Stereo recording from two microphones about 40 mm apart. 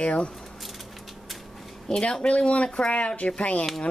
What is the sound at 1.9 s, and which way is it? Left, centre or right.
Speech, centre.